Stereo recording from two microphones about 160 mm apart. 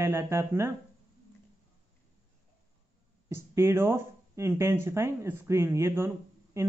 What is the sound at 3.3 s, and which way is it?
Speech, 15° right (ahead or behind).